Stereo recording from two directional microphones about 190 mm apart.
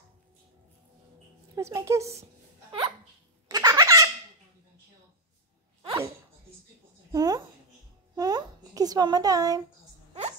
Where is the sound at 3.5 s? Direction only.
20° right (ahead or behind).